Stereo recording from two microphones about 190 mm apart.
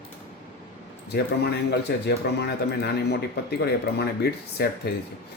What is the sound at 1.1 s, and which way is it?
Speech, 60° left (ahead or behind).